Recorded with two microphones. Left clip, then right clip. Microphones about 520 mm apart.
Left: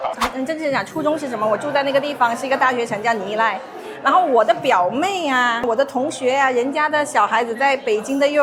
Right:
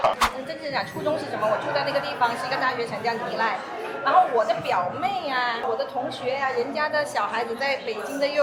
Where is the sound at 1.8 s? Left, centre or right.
Left.